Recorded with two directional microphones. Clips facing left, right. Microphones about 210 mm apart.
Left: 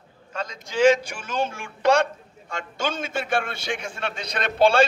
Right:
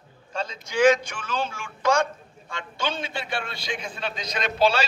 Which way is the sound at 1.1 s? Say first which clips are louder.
Left 2 dB; 45° left (ahead or behind).